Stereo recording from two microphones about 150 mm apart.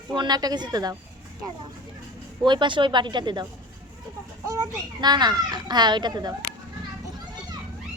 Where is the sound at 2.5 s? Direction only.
30° right (ahead or behind).